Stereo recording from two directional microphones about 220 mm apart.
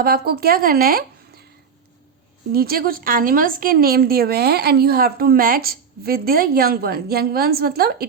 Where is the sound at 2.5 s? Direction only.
45° right (ahead or behind).